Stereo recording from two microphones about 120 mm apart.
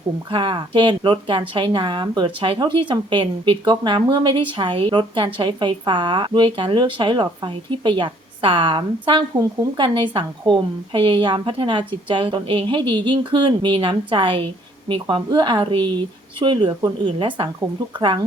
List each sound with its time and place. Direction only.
0.3 s speech: 45° right (ahead or behind)